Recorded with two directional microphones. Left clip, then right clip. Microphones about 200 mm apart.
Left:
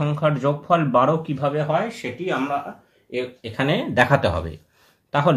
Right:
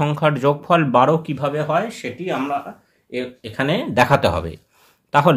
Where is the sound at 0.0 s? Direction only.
30° right (ahead or behind).